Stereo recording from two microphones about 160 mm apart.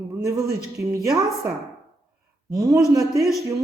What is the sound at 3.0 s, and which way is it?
Speech, centre (ahead or behind).